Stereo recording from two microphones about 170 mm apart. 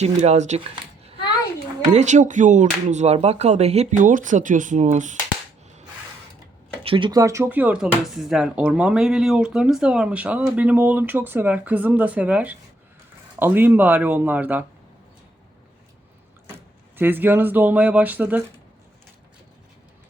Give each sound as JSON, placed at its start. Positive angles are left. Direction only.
{"t": 0.0, "sound": "speech", "side_deg": -40}
{"t": 6.8, "sound": "speech", "side_deg": -30}
{"t": 17.0, "sound": "speech", "side_deg": -10}